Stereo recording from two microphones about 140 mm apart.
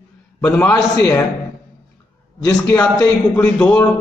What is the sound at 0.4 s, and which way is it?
Speech, 10° left (ahead or behind).